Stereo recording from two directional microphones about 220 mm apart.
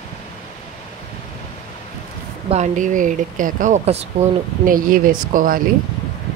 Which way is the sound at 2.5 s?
35° right (ahead or behind).